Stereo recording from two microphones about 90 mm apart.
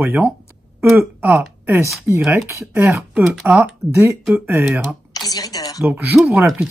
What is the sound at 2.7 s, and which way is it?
Speech, 35° right (ahead or behind).